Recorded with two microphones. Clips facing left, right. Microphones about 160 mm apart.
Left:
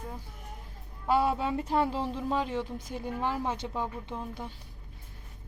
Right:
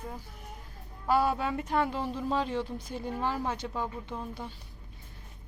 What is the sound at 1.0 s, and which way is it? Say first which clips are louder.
Speech: even; 20° left (ahead or behind).